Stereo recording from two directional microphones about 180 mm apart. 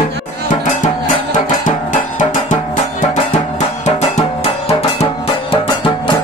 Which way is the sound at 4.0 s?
35° left (ahead or behind).